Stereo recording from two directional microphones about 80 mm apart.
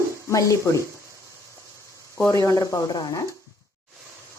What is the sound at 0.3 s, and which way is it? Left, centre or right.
Speech, left.